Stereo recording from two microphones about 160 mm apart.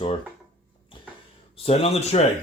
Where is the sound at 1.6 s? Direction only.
40° left (ahead or behind).